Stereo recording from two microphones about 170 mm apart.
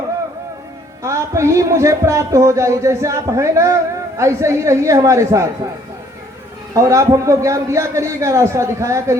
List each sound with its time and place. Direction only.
1.0 s a man's voice: 15° right (ahead or behind)
6.7 s a man's voice: 20° right (ahead or behind)